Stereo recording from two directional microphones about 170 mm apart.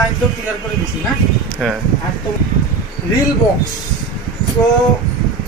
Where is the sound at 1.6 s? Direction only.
5° left (ahead or behind).